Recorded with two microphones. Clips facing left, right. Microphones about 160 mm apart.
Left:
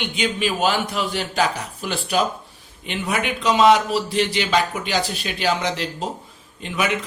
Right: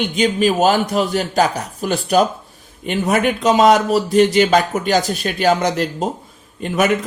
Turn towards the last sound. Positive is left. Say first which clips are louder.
# right 7 dB
turn(degrees=-45)  # may be behind; listen again after turning